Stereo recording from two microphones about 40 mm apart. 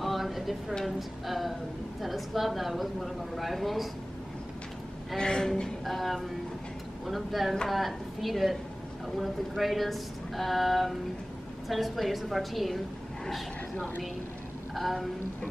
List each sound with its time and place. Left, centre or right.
0.0 s a sound: centre
0.8 s a woman's voice: centre
5.1 s speech: centre
5.9 s a woman's voice: centre
13.7 s a woman's voice: left
14.7 s speech: centre